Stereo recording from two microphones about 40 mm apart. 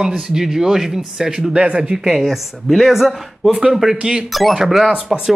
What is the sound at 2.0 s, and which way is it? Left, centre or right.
Speech, centre.